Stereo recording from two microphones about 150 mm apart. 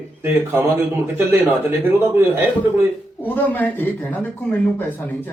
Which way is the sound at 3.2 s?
10° left (ahead or behind).